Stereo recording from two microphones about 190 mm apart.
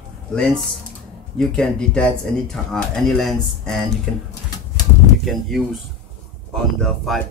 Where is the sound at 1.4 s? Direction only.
5° left (ahead or behind).